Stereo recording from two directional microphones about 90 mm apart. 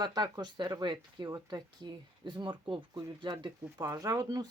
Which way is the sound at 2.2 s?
60° right (ahead or behind).